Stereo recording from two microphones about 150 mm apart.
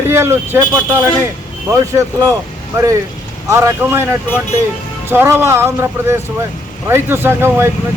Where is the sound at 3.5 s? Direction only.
20° right (ahead or behind).